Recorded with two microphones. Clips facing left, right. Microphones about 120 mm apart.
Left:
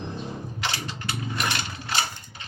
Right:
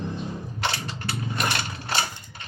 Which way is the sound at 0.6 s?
30° right (ahead or behind).